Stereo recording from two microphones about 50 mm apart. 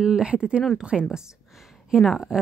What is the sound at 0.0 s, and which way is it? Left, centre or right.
Speech, centre.